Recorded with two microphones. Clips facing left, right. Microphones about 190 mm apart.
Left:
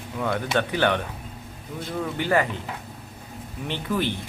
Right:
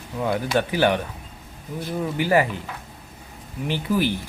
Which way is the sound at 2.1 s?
10° right (ahead or behind).